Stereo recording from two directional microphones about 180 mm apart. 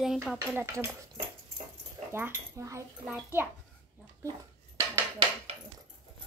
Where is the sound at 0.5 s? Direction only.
15° right (ahead or behind).